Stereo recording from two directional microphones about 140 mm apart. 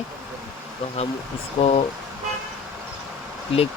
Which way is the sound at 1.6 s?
45° left (ahead or behind).